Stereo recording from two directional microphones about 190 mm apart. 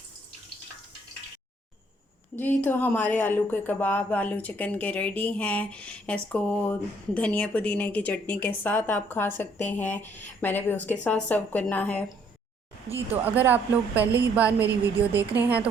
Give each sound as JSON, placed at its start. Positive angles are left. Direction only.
{"t": 2.3, "sound": "a woman's voice", "side_deg": 10}
{"t": 12.9, "sound": "speech", "side_deg": -30}
{"t": 13.2, "sound": "speech", "side_deg": -10}